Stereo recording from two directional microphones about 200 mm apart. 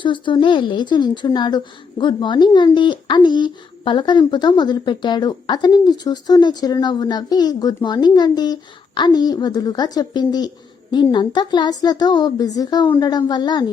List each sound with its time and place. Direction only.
0.0 s a woman's voice: 25° left (ahead or behind)